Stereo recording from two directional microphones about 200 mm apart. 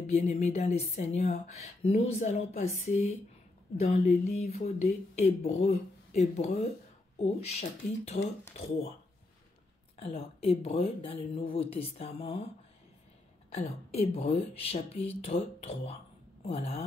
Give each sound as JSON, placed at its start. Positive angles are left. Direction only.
{"t": 0.0, "sound": "speech", "side_deg": 35}
{"t": 8.1, "sound": "speech", "side_deg": 45}
{"t": 9.9, "sound": "speech", "side_deg": 30}
{"t": 13.6, "sound": "speech", "side_deg": 30}